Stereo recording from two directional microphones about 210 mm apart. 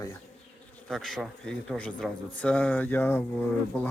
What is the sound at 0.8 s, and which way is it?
Speech, centre (ahead or behind).